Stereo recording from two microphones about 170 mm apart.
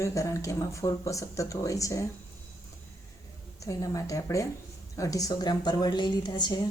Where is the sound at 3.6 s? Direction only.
20° left (ahead or behind).